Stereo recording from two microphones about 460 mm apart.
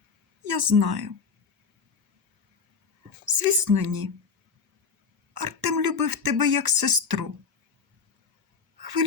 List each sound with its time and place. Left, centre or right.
0.6 s speech: right
3.2 s speech: right
5.4 s speech: right
8.8 s a sound: right